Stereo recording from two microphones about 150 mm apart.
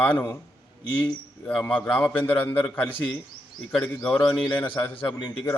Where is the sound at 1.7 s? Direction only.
10° left (ahead or behind).